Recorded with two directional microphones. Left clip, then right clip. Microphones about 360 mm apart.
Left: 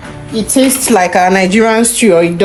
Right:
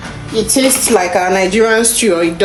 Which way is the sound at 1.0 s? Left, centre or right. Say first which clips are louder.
Left 5 dB; left.